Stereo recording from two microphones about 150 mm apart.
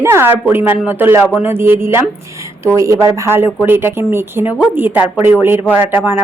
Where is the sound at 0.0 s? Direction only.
15° right (ahead or behind).